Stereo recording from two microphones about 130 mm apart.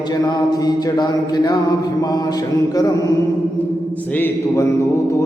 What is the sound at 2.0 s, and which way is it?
Mantra, 30° left (ahead or behind).